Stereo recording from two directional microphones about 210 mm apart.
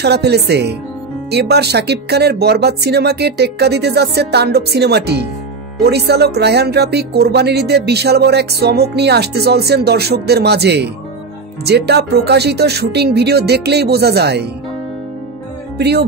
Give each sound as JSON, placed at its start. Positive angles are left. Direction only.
{"t": 0.0, "sound": "speech", "side_deg": -50}